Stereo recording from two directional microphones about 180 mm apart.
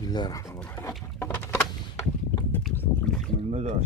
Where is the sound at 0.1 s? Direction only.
20° left (ahead or behind).